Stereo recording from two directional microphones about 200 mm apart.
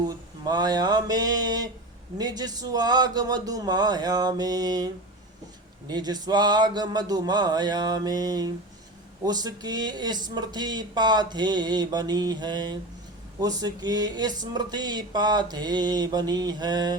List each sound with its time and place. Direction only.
0.4 s speech: 20° right (ahead or behind)
5.9 s speech: 20° right (ahead or behind)